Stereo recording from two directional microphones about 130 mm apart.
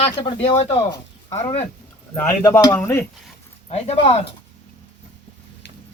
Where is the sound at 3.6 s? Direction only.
50° left (ahead or behind).